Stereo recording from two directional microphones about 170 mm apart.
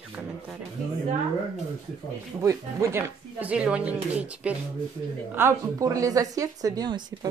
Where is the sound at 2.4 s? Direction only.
20° right (ahead or behind).